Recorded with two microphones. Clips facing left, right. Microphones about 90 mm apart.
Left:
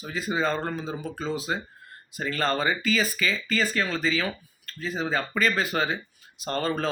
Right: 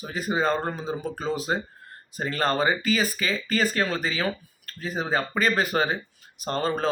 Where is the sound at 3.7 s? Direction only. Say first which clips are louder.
Even; 50° right (ahead or behind).